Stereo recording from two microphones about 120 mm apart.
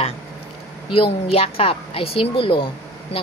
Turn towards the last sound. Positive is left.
turn(degrees=45)  # may be behind; listen again after turning